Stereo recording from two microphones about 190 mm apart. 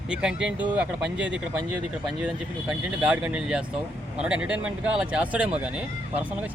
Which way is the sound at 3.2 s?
5° right (ahead or behind).